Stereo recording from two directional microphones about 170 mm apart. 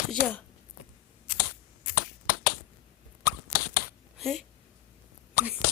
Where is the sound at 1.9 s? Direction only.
60° left (ahead or behind).